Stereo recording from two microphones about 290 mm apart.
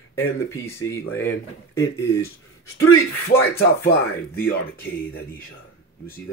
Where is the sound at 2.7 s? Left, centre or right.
Left.